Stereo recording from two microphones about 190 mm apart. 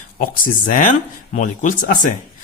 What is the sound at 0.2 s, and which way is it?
Speech, 45° left (ahead or behind).